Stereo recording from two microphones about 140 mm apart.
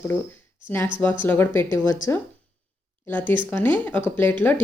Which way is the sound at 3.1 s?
15° left (ahead or behind).